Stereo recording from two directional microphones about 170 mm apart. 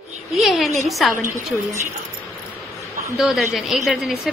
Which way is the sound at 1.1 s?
50° right (ahead or behind).